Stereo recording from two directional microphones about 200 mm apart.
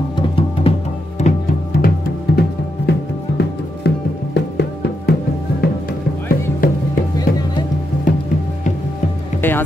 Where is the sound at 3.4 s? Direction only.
55° left (ahead or behind).